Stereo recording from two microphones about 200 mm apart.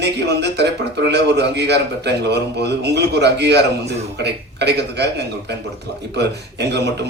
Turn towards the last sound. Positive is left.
turn(degrees=-55)  # may be behind; listen again after turning